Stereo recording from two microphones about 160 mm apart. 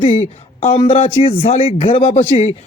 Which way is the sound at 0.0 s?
40° left (ahead or behind).